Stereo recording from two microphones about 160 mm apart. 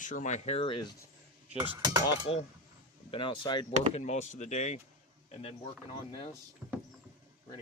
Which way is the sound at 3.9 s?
45° left (ahead or behind).